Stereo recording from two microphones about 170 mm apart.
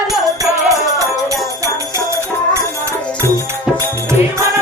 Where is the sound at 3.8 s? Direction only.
15° right (ahead or behind).